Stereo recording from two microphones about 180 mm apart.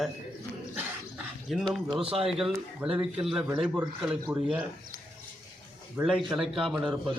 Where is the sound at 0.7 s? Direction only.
5° right (ahead or behind).